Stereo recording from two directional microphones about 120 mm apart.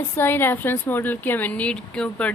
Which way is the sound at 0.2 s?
20° left (ahead or behind).